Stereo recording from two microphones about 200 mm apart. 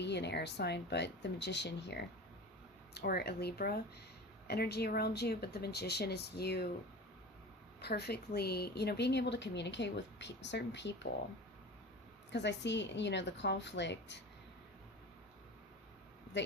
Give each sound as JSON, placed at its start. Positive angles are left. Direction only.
{"t": 0.0, "sound": "a woman's voice", "side_deg": 60}
{"t": 7.8, "sound": "a woman's voice", "side_deg": 55}
{"t": 12.3, "sound": "a woman's voice", "side_deg": 60}